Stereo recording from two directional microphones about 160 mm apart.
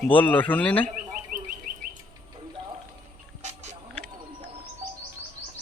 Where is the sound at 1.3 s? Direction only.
55° right (ahead or behind).